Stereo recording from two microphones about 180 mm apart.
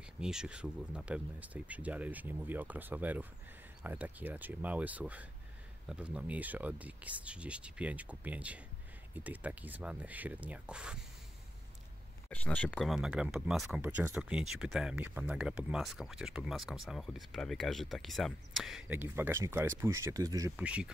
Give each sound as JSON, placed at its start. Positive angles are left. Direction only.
{"t": 0.2, "sound": "speech", "side_deg": -5}
{"t": 12.3, "sound": "speech", "side_deg": 5}
{"t": 20.5, "sound": "speech", "side_deg": -5}